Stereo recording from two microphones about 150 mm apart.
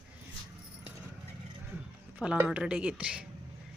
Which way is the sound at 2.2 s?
5° right (ahead or behind).